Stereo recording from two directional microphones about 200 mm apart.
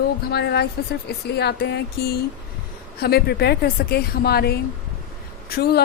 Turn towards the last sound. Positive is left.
turn(degrees=50)  # may be behind; listen again after turning